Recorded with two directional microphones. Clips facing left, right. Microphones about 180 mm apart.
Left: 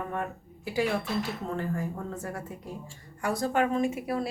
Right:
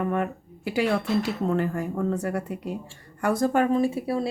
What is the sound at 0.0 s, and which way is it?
Speech, 75° right (ahead or behind).